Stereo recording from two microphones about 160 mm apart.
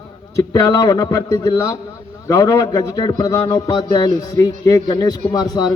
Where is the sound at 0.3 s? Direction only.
20° left (ahead or behind).